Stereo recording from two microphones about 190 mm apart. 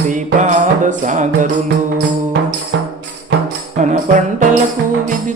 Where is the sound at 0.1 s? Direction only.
40° right (ahead or behind).